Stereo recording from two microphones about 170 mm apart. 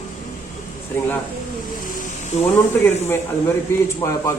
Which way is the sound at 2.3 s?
45° left (ahead or behind).